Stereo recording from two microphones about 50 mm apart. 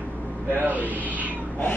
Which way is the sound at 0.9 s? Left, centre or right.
Right.